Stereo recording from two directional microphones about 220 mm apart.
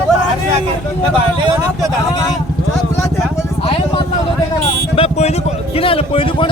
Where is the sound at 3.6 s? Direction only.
25° left (ahead or behind).